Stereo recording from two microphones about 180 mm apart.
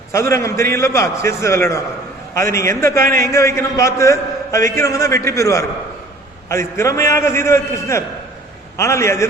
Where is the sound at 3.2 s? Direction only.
15° left (ahead or behind).